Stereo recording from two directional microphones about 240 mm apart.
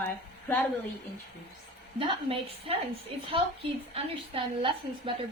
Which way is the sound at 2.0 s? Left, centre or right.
Right.